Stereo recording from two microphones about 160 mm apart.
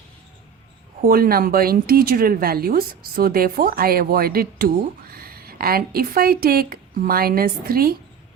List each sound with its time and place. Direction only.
1.0 s a woman's voice: 70° right (ahead or behind)